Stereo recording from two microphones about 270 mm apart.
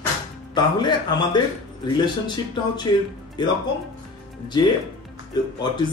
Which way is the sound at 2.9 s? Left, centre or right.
Centre.